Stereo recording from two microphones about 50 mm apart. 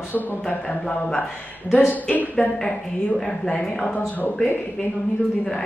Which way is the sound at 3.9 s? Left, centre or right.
Left.